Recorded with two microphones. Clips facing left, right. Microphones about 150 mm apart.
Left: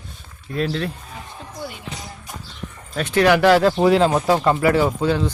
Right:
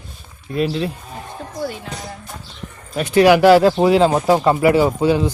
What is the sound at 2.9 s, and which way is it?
Speech, 10° right (ahead or behind).